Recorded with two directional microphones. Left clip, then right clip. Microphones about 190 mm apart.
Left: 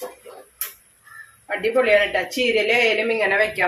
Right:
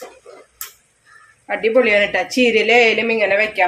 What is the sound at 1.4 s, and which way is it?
A woman's voice, 65° right (ahead or behind).